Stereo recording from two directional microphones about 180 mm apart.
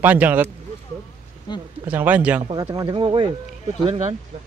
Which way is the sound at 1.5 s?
25° left (ahead or behind).